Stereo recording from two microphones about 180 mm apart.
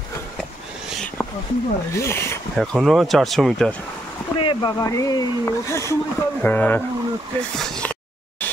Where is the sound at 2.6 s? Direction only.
Centre (ahead or behind).